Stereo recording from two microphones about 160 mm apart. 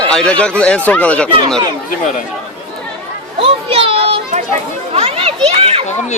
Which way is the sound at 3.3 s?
35° right (ahead or behind).